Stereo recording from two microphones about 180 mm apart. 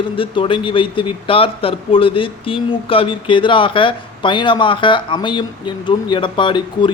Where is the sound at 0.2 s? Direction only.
30° left (ahead or behind).